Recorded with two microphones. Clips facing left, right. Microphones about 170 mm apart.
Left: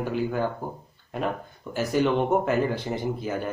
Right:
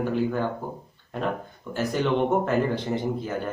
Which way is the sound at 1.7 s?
10° left (ahead or behind).